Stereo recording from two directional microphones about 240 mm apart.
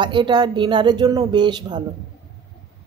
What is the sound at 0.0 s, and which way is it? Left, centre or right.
Speech, centre.